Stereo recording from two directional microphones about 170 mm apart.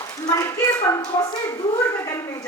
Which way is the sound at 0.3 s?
15° left (ahead or behind).